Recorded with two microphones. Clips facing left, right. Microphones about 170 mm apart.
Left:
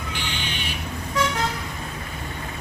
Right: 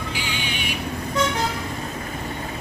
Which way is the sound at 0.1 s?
10° right (ahead or behind).